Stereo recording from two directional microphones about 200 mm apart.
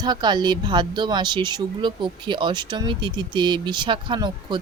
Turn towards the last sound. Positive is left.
turn(degrees=-20)  # may be behind; listen again after turning